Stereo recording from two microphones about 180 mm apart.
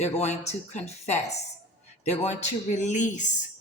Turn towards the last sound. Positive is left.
turn(degrees=45)  # may be behind; listen again after turning